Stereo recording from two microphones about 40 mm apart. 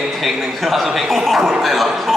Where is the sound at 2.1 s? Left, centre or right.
Centre.